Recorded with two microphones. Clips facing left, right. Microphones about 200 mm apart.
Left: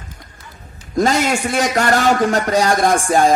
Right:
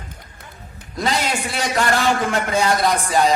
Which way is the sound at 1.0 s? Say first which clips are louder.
Left 6 dB; 45° left (ahead or behind).